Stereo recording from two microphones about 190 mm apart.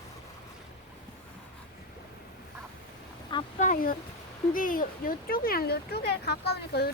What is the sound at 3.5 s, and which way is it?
Speech, 45° left (ahead or behind).